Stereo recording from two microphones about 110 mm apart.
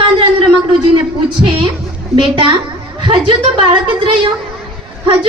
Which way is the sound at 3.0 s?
50° right (ahead or behind).